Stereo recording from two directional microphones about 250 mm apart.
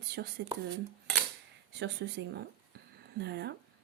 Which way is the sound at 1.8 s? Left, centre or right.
Right.